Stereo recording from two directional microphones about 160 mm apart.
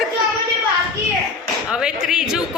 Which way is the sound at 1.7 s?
5° right (ahead or behind).